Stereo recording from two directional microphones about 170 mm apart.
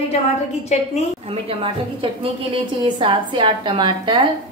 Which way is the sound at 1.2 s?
30° right (ahead or behind).